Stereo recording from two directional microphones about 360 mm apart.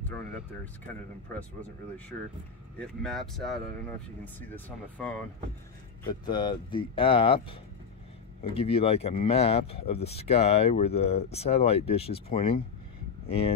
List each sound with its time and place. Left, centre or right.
2.8 s speech: centre
6.2 s speech: centre
8.5 s speech: centre